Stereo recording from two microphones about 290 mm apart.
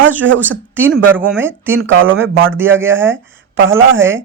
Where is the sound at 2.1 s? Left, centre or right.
Right.